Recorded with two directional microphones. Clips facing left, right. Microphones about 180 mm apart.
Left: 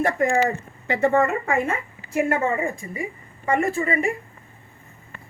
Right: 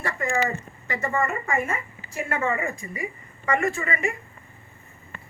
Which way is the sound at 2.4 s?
30° left (ahead or behind).